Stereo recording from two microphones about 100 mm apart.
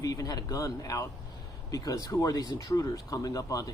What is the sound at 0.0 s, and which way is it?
Speech, 35° left (ahead or behind).